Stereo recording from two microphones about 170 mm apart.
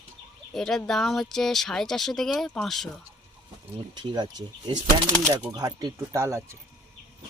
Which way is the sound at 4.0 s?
25° right (ahead or behind).